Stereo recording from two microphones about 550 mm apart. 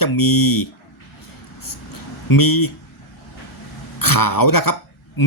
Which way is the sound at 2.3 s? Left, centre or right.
Left.